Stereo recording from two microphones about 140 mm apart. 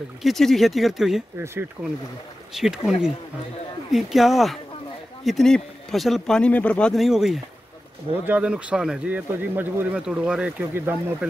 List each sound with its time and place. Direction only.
0.2 s speech: centre (ahead or behind)
1.4 s a man's voice: 15° right (ahead or behind)
2.5 s a man's voice: 5° right (ahead or behind)